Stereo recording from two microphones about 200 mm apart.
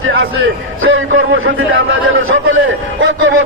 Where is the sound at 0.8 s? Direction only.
80° right.